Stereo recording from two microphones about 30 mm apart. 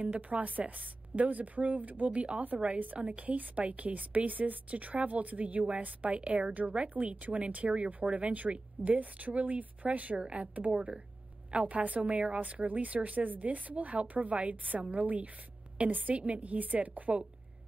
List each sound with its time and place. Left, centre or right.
0.0 s a woman's voice: right
7.7 s speech: right
8.1 s a woman's voice: right
10.1 s speech: right
10.4 s a woman's voice: right
15.8 s a woman's voice: right